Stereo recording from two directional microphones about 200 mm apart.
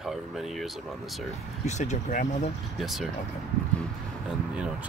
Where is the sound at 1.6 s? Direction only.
35° left (ahead or behind).